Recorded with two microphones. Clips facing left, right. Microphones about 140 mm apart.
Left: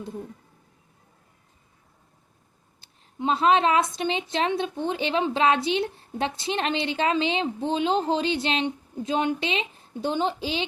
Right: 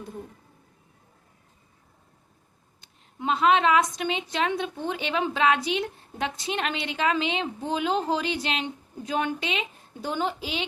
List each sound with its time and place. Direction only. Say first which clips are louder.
2.8 s a woman's voice: left 2 dB; 30° left (ahead or behind)